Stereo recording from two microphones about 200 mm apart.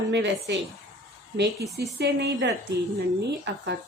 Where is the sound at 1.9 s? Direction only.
55° right (ahead or behind).